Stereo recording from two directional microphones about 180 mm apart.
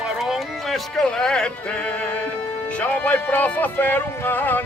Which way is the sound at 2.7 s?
10° left (ahead or behind).